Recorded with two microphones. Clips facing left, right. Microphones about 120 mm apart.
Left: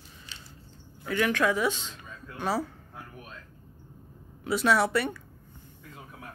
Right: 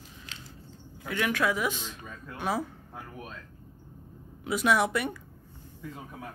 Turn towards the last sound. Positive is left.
turn(degrees=-15)  # may be behind; listen again after turning